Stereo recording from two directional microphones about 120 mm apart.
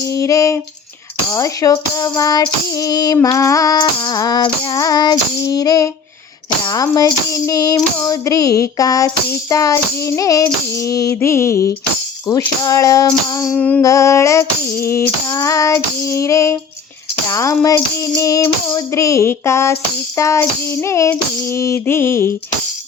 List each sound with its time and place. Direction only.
0.0 s child singing: 25° left (ahead or behind)
1.3 s female singing: 25° left (ahead or behind)
6.7 s child singing: 30° left (ahead or behind)
12.3 s female singing: 30° left (ahead or behind)
12.6 s child singing: 30° left (ahead or behind)
13.6 s music: 10° left (ahead or behind)
13.8 s child singing: 25° left (ahead or behind)